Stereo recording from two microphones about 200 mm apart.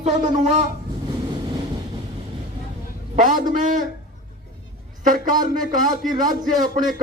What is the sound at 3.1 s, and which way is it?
Speech, 40° right (ahead or behind).